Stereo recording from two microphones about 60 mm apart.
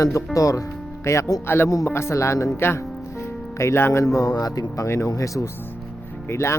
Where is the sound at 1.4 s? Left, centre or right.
Left.